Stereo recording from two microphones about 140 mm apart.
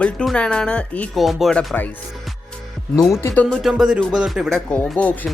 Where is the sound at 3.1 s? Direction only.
15° left (ahead or behind).